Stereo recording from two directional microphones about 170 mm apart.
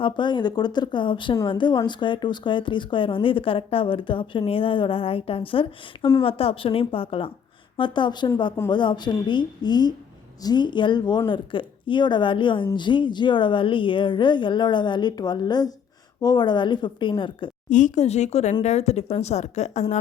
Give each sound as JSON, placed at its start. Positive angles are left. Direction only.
{"t": 0.0, "sound": "speech", "side_deg": 25}
{"t": 17.7, "sound": "speech", "side_deg": 50}